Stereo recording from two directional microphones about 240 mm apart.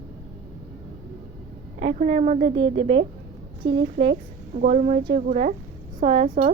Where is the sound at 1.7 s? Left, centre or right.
Right.